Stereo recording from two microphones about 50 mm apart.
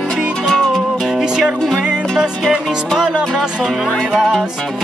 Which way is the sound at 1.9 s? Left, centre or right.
Centre.